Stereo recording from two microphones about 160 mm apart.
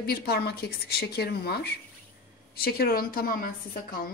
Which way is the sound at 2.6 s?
70° left (ahead or behind).